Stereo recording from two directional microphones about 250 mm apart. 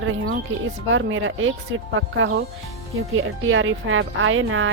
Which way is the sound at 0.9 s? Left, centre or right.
Right.